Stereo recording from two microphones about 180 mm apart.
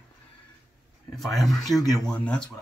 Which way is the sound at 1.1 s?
Centre (ahead or behind).